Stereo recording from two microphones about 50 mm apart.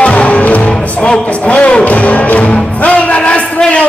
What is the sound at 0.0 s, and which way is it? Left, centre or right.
Music, left.